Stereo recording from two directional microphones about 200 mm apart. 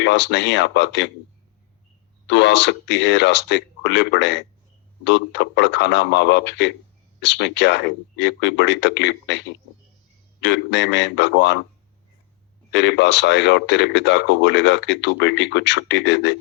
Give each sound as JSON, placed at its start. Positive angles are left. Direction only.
{"t": 0.0, "sound": "speech", "side_deg": 60}
{"t": 2.2, "sound": "speech", "side_deg": 60}
{"t": 10.4, "sound": "speech", "side_deg": 60}
{"t": 12.7, "sound": "speech", "side_deg": 60}